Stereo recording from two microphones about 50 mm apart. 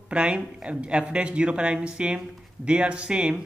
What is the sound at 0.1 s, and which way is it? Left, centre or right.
Speech, right.